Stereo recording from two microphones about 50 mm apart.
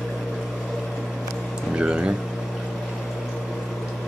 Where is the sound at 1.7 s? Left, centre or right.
Right.